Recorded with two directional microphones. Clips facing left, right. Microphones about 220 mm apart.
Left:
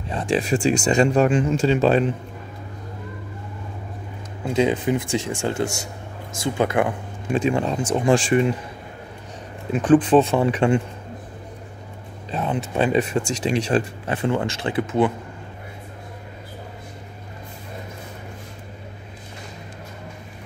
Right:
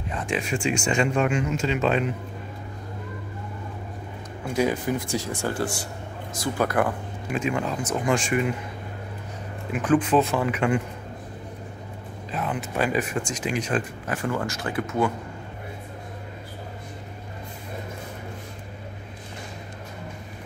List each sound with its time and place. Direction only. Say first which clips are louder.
0.1 s speech: left 6 dB; 30° left (ahead or behind)
4.6 s speech: left 4 dB; 20° left (ahead or behind)
9.7 s speech: left 6 dB; 30° left (ahead or behind)
12.3 s speech: left 4 dB; 30° left (ahead or behind)